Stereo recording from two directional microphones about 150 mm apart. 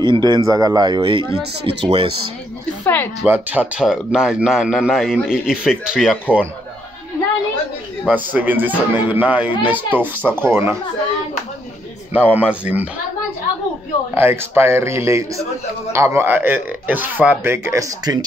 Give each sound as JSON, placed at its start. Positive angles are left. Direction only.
{"t": 0.0, "sound": "speech", "side_deg": -30}
{"t": 2.8, "sound": "speech", "side_deg": 10}
{"t": 3.3, "sound": "speech", "side_deg": -10}
{"t": 8.1, "sound": "speech", "side_deg": -10}
{"t": 12.1, "sound": "speech", "side_deg": -10}
{"t": 14.1, "sound": "speech", "side_deg": -15}